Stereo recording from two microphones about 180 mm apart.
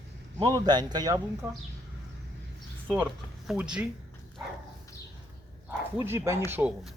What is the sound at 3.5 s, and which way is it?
Speech, 5° right (ahead or behind).